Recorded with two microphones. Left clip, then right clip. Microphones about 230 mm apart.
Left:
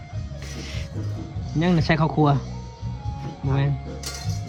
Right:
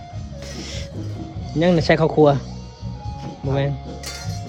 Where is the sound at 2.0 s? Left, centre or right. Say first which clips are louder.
Right 7 dB; left.